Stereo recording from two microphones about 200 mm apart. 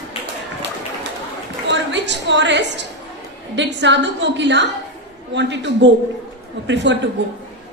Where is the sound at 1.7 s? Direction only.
60° right (ahead or behind).